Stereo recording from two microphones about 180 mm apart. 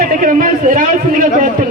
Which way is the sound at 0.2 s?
50° right (ahead or behind).